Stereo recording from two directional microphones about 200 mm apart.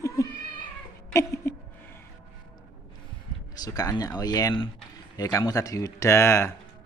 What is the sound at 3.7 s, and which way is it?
Speech, 15° left (ahead or behind).